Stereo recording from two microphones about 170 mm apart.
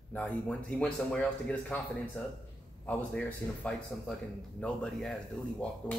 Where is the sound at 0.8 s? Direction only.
5° left (ahead or behind).